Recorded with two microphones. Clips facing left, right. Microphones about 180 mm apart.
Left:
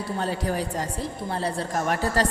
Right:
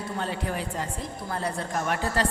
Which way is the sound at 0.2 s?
40° left (ahead or behind).